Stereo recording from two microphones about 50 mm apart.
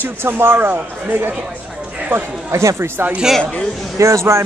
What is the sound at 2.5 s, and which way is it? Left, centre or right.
Speech, right.